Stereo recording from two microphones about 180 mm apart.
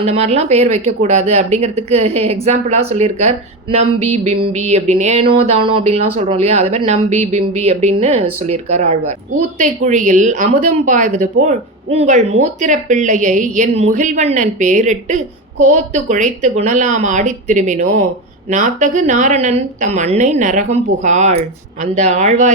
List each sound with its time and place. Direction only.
0.0 s speech: 35° right (ahead or behind)